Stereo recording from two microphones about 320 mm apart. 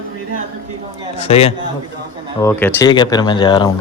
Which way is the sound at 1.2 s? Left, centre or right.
Centre.